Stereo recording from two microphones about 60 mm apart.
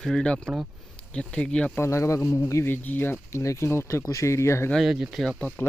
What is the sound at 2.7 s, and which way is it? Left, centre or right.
Speech, left.